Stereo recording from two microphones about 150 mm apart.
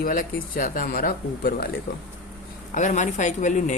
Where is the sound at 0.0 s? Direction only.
70° left (ahead or behind).